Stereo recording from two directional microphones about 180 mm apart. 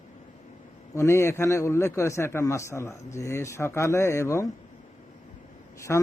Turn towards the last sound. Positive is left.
turn(degrees=15)  # may be behind; listen again after turning